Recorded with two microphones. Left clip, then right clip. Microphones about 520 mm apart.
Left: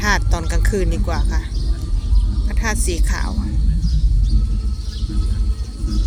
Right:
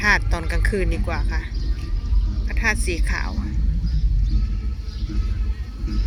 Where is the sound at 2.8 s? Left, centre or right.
Right.